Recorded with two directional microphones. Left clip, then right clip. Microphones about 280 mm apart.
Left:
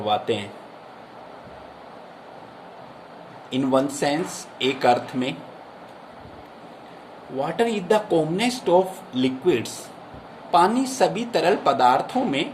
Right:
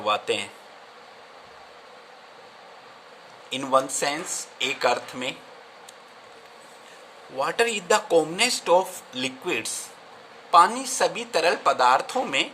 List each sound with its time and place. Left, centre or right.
0.0 s speech: right
3.5 s speech: right
7.3 s speech: right